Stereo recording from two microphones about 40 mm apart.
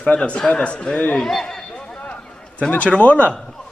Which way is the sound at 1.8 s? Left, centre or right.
Left.